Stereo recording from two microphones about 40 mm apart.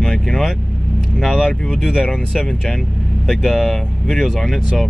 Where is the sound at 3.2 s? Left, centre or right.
Centre.